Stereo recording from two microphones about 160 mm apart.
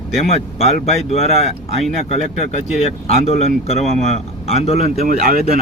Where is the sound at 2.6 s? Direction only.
40° left (ahead or behind).